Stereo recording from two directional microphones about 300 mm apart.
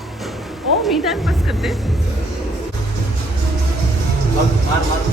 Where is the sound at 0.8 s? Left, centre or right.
Centre.